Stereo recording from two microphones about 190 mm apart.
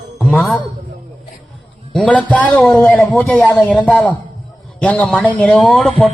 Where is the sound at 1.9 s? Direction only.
5° left (ahead or behind).